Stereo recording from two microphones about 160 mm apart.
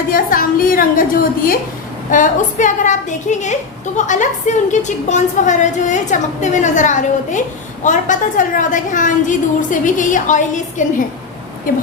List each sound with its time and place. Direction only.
0.1 s a woman's voice: 60° left (ahead or behind)